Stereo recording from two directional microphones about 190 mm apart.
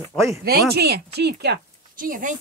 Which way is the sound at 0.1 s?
Centre (ahead or behind).